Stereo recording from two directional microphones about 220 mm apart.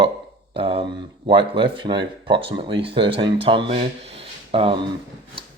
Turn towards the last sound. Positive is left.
turn(degrees=-25)  # may be behind; listen again after turning